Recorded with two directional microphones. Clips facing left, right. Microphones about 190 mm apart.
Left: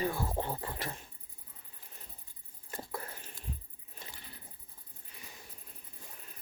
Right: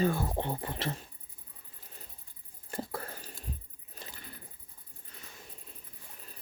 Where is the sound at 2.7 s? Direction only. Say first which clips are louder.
Right 4 dB; 30° right (ahead or behind).